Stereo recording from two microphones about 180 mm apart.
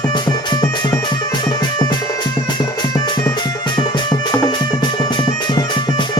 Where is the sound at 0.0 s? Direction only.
25° left (ahead or behind).